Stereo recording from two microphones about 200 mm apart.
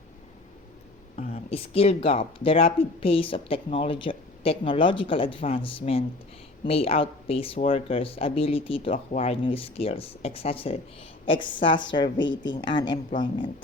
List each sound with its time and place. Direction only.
1.1 s speech: 30° left (ahead or behind)